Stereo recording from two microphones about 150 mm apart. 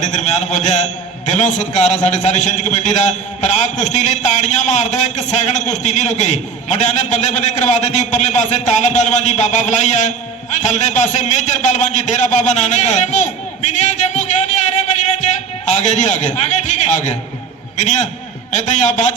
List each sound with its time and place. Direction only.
0.0 s a man's voice: 50° left (ahead or behind)